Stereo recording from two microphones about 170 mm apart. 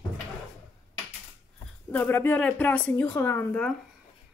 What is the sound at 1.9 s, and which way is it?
Speech, 10° left (ahead or behind).